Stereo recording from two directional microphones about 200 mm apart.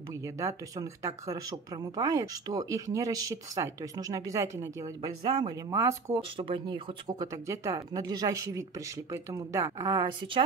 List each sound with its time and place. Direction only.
0.1 s speech: 15° right (ahead or behind)
6.3 s speech: 25° right (ahead or behind)